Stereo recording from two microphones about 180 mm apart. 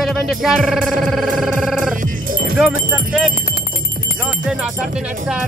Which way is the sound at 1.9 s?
50° right (ahead or behind).